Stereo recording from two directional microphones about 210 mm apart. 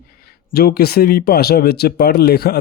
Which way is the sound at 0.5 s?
45° left (ahead or behind).